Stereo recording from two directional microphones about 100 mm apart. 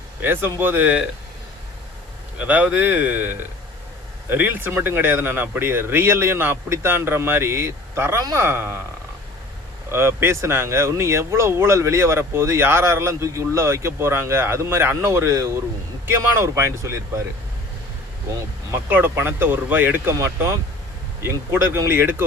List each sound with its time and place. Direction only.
0.2 s speech: 20° right (ahead or behind)
2.4 s speech: 15° right (ahead or behind)
8.2 s speech: 40° right (ahead or behind)
8.4 s speech: 25° right (ahead or behind)
9.9 s speech: 25° right (ahead or behind)
18.3 s speech: 25° right (ahead or behind)